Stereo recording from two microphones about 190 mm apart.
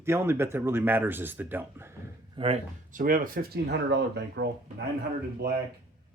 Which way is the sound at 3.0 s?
45° right (ahead or behind).